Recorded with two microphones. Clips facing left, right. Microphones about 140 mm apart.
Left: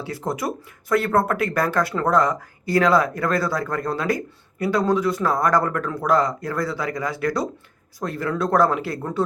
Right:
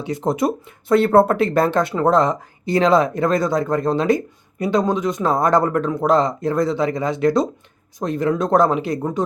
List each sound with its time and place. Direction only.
0.0 s speech: 20° right (ahead or behind)